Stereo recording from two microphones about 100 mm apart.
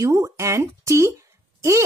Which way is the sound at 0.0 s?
30° right (ahead or behind).